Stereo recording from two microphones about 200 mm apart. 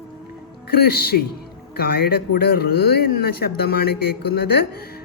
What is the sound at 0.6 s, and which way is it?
Speech, 50° left (ahead or behind).